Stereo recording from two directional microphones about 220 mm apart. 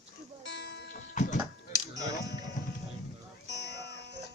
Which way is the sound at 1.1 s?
35° left (ahead or behind).